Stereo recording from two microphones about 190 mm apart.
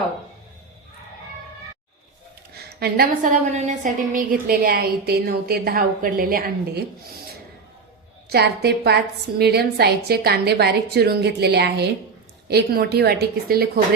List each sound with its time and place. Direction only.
2.5 s a woman's voice: 55° right (ahead or behind)
3.5 s a woman's voice: 40° right (ahead or behind)
8.3 s a woman's voice: 60° right (ahead or behind)